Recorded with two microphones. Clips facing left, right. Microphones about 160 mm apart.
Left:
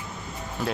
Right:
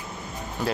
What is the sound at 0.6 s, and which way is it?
Speech, centre (ahead or behind).